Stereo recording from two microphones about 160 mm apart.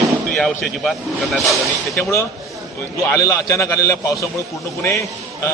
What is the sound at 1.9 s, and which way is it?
A man's voice, 15° left (ahead or behind).